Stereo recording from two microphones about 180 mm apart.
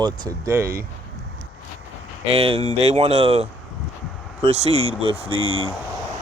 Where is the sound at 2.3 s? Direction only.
30° right (ahead or behind).